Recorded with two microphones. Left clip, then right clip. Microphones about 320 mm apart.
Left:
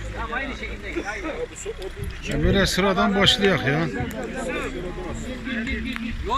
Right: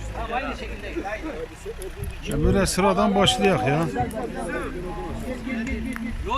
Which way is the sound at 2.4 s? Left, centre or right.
Centre.